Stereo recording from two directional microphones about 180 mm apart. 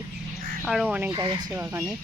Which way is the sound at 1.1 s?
25° right (ahead or behind).